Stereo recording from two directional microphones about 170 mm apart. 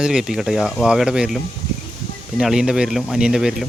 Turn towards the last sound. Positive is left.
turn(degrees=-5)  # may be behind; listen again after turning